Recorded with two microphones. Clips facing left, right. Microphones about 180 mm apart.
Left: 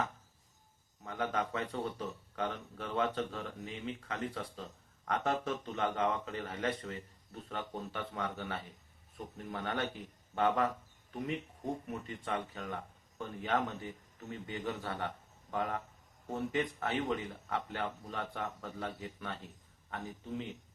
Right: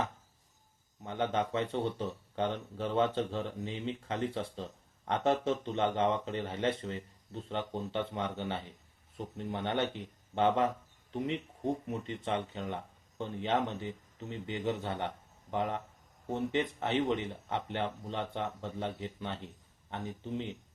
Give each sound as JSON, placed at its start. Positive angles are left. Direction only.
{"t": 1.0, "sound": "speech", "side_deg": -25}
{"t": 11.9, "sound": "speech", "side_deg": -25}